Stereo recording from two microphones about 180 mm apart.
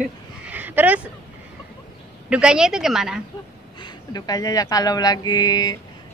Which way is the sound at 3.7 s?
25° left (ahead or behind).